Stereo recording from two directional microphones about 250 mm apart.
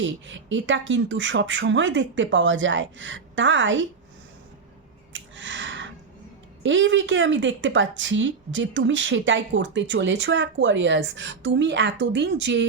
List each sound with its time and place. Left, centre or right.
0.0 s a woman's voice: right
5.1 s a sound: right
6.6 s a woman's voice: right